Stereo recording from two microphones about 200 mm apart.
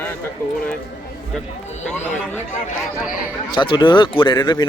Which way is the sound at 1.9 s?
10° left (ahead or behind).